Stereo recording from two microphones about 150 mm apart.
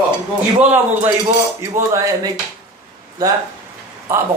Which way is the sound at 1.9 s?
20° right (ahead or behind).